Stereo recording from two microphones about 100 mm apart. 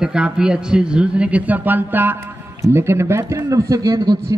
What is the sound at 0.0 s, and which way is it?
A man's voice, 10° right (ahead or behind).